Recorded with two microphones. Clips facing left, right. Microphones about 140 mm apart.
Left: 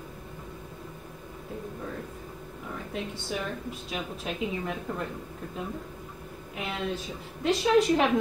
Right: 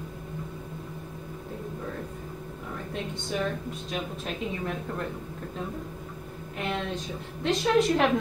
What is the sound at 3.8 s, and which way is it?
A woman's voice, 5° left (ahead or behind).